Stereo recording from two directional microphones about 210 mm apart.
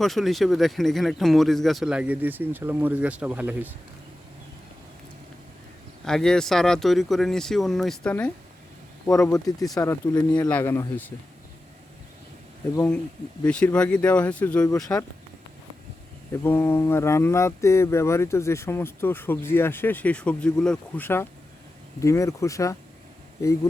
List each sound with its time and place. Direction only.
0.0 s speech: centre (ahead or behind)
6.1 s speech: 5° left (ahead or behind)
9.7 s speech: 15° left (ahead or behind)
12.7 s speech: 5° left (ahead or behind)
16.4 s speech: 10° left (ahead or behind)